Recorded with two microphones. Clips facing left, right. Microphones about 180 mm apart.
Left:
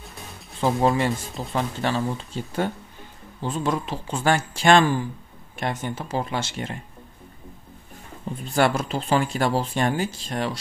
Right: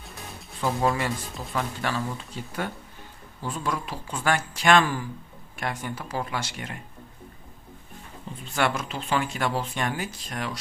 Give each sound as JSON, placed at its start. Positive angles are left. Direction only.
{"t": 0.6, "sound": "speech", "side_deg": 25}
{"t": 8.5, "sound": "speech", "side_deg": 35}